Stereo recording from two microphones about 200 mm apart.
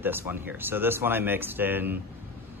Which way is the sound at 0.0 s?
10° right (ahead or behind).